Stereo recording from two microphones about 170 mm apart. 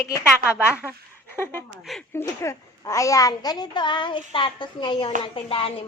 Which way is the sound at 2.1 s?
15° left (ahead or behind).